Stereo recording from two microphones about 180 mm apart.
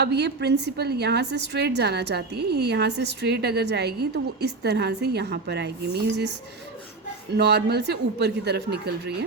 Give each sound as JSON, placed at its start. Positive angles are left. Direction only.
{"t": 0.0, "sound": "a woman's voice", "side_deg": -70}
{"t": 7.3, "sound": "a woman's voice", "side_deg": -65}